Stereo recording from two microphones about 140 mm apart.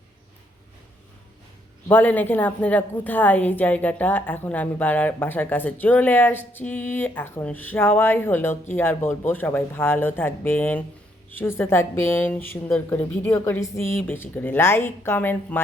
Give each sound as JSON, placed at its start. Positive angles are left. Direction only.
{"t": 1.9, "sound": "a woman's voice", "side_deg": 15}